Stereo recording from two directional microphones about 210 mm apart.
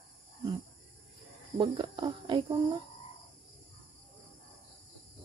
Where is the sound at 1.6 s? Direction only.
25° right (ahead or behind).